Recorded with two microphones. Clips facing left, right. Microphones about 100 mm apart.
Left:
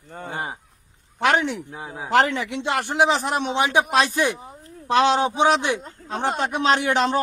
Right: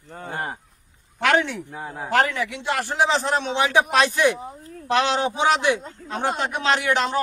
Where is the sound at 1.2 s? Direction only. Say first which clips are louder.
Even; 20° left (ahead or behind).